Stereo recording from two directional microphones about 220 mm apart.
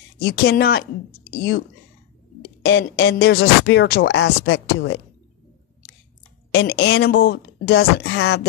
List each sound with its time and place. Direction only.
0.2 s speech: 45° left (ahead or behind)
2.6 s speech: 50° left (ahead or behind)
6.5 s speech: 50° left (ahead or behind)